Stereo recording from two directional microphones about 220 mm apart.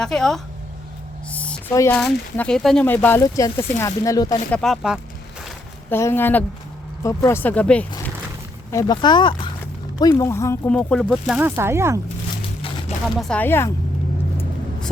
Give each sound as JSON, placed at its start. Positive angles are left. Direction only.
{"t": 0.0, "sound": "speech", "side_deg": 0}
{"t": 1.3, "sound": "a sound", "side_deg": 5}
{"t": 2.0, "sound": "speech", "side_deg": 5}
{"t": 4.5, "sound": "speech", "side_deg": 0}
{"t": 5.9, "sound": "speech", "side_deg": 10}
{"t": 8.7, "sound": "speech", "side_deg": 15}
{"t": 13.1, "sound": "speech", "side_deg": 5}